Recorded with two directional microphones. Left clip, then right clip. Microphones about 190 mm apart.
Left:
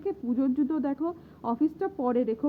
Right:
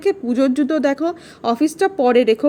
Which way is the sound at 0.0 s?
10° right (ahead or behind).